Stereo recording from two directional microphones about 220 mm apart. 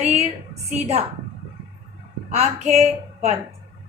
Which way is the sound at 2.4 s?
30° right (ahead or behind).